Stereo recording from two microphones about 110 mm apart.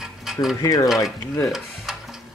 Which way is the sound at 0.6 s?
30° left (ahead or behind).